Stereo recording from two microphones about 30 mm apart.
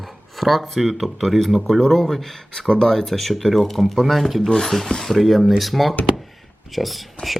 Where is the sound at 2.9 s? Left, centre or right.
Centre.